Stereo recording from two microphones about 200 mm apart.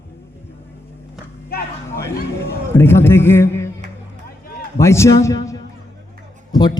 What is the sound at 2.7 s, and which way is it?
Speech, 10° left (ahead or behind).